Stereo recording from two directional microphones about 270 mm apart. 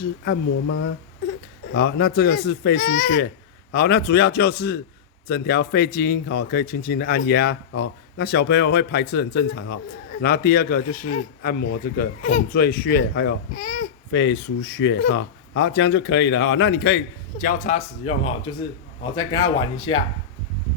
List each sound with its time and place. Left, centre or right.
0.7 s speech: left
1.7 s speech: left; by 20.0 s centre